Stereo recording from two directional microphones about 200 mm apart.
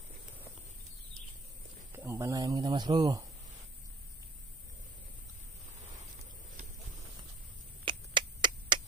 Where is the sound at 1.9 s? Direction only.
10° right (ahead or behind).